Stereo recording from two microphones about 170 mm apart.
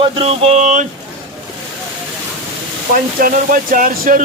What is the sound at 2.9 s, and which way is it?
Speech, 55° right (ahead or behind).